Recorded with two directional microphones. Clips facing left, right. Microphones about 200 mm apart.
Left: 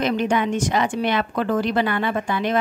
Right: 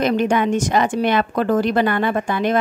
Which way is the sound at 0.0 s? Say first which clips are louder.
Right 3 dB; 45° right (ahead or behind).